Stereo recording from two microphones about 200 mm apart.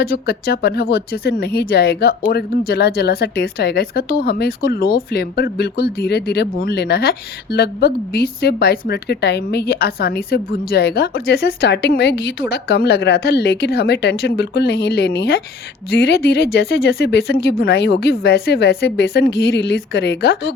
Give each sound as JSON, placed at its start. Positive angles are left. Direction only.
{"t": 0.0, "sound": "speech", "side_deg": 50}